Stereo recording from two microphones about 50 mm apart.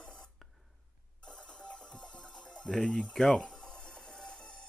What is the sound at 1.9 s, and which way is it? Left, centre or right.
Music, centre.